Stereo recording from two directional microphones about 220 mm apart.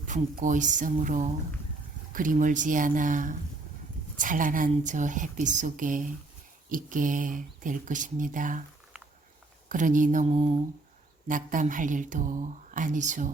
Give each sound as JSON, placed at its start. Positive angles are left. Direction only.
{"t": 0.1, "sound": "speech", "side_deg": -35}
{"t": 9.6, "sound": "speech", "side_deg": -35}
{"t": 11.3, "sound": "speech", "side_deg": -35}